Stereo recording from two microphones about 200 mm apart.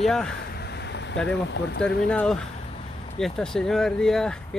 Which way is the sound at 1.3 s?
60° left (ahead or behind).